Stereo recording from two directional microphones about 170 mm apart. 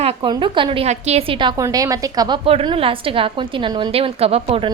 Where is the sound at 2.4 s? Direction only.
30° right (ahead or behind).